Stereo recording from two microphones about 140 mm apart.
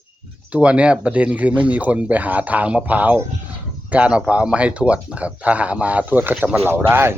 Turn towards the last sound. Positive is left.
turn(degrees=-15)  # may be behind; listen again after turning